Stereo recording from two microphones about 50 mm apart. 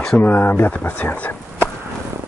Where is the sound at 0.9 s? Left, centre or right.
Left.